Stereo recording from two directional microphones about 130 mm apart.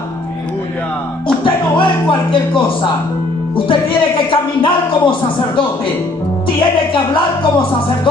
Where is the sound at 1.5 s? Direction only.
40° left (ahead or behind).